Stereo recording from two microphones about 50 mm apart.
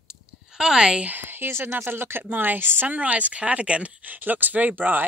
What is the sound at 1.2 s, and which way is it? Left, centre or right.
Speech, right.